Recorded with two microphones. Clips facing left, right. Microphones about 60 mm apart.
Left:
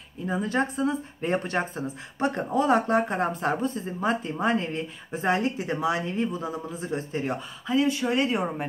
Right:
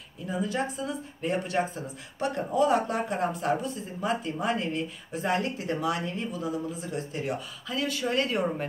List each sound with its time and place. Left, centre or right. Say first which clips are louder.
0.3 s speech: left 3 dB; left
7.7 s speech: left 5 dB; left